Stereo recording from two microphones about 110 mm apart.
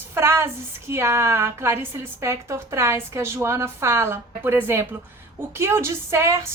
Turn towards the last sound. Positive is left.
turn(degrees=-25)  # may be behind; listen again after turning